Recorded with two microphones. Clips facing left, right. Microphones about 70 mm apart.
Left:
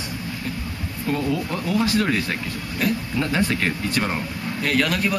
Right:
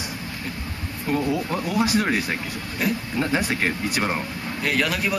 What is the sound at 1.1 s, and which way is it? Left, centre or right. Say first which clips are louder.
Speech: right 1 dB; centre.